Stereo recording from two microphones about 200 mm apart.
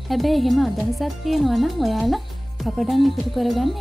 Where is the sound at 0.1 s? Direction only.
Centre (ahead or behind).